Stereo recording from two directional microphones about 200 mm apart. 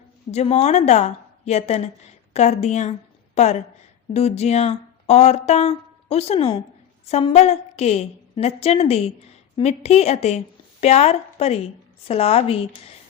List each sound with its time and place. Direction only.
0.3 s a woman's voice: 35° left (ahead or behind)